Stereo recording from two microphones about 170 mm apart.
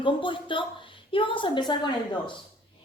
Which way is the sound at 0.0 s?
30° left (ahead or behind).